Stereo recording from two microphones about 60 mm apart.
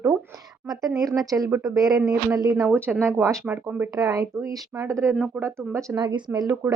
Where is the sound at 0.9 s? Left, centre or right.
Right.